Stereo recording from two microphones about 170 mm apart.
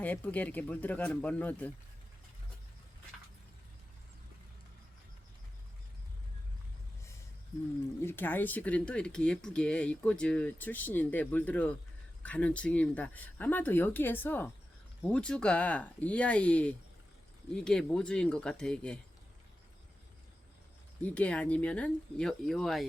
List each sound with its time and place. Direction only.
0.0 s speech: 10° left (ahead or behind)
8.0 s speech: 10° left (ahead or behind)
21.0 s speech: 5° left (ahead or behind)